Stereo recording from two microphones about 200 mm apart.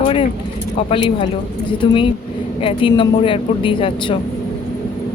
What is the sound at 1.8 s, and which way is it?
Speech, 25° left (ahead or behind).